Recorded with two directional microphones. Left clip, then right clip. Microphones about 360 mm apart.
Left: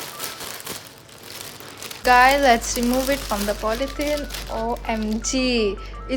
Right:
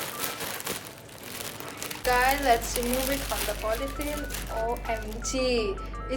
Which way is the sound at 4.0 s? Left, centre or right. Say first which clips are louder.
Left 9 dB; left.